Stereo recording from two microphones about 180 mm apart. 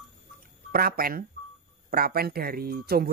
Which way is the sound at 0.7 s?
55° right (ahead or behind).